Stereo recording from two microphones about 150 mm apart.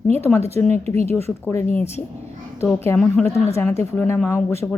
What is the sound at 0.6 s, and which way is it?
Speech, 50° right (ahead or behind).